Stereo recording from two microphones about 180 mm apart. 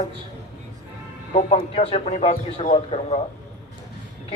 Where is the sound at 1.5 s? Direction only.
35° left (ahead or behind).